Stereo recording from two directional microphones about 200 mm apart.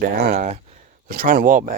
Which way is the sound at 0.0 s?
50° right (ahead or behind).